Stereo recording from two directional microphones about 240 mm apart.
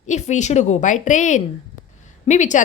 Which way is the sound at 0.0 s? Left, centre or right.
Left.